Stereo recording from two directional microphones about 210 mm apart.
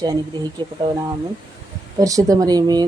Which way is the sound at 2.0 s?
15° right (ahead or behind).